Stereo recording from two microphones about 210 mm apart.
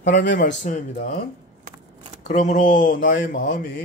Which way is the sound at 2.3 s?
35° left (ahead or behind).